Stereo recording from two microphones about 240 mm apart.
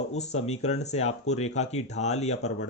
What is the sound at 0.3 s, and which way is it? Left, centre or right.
A man's voice, left.